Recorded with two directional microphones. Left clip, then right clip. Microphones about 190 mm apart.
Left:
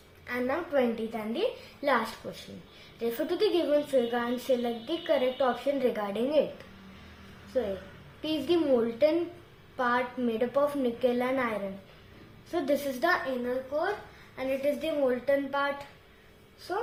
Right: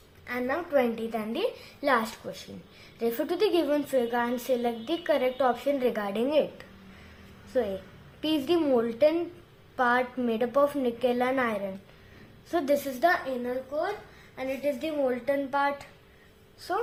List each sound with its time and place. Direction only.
0.3 s a woman's voice: 25° right (ahead or behind)
7.5 s a woman's voice: 30° right (ahead or behind)